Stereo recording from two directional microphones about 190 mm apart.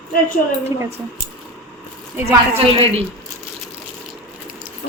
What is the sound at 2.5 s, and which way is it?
Speech, 30° right (ahead or behind).